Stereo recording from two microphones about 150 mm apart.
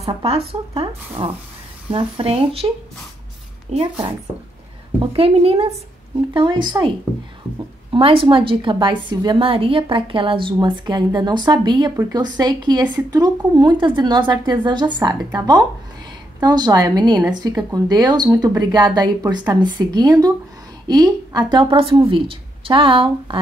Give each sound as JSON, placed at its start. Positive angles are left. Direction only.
{"t": 0.0, "sound": "a woman's voice", "side_deg": -40}
{"t": 3.7, "sound": "speech", "side_deg": -45}
{"t": 5.1, "sound": "a woman's voice", "side_deg": -40}
{"t": 7.9, "sound": "a woman's voice", "side_deg": -40}